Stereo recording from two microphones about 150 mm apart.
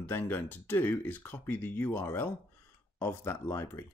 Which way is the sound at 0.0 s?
10° left (ahead or behind).